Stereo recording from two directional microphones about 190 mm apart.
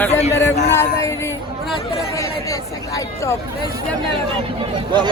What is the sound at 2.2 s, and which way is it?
Speech, 15° left (ahead or behind).